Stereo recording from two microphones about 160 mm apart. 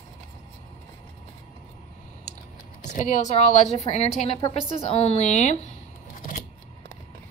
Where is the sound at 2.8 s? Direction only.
50° left (ahead or behind).